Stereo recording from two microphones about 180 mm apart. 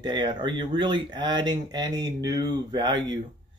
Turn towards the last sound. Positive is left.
turn(degrees=-25)  # may be behind; listen again after turning